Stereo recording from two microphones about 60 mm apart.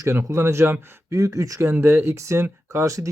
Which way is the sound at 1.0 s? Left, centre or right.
Right.